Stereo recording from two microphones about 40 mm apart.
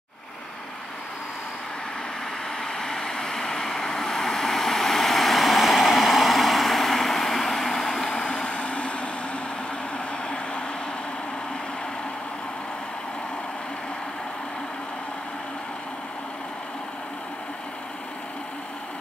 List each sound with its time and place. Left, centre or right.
2.6 s vehicle: centre